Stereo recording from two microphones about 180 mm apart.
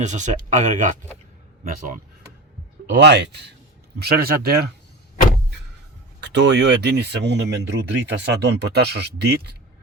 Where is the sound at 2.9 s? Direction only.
75° right (ahead or behind).